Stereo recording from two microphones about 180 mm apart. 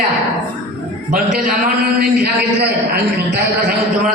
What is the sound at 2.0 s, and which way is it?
Speech, 60° right (ahead or behind).